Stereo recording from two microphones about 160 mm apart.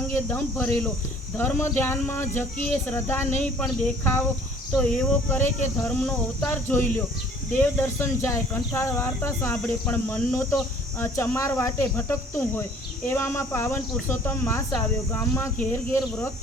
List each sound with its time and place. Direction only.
0.5 s speech: 5° left (ahead or behind)
6.4 s speech: 15° left (ahead or behind)